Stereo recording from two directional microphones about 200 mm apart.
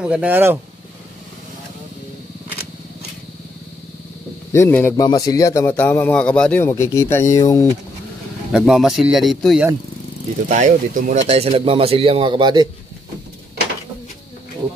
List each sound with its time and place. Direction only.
0.0 s speech: 5° right (ahead or behind)
4.5 s a man's voice: 10° left (ahead or behind)
8.5 s speech: centre (ahead or behind)
10.5 s speech: 40° right (ahead or behind); by 12.6 s 20° right (ahead or behind)